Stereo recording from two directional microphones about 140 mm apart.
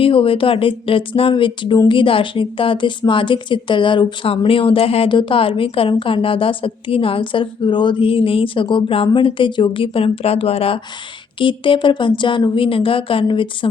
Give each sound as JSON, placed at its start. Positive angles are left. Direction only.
{"t": 0.0, "sound": "a woman's voice", "side_deg": 40}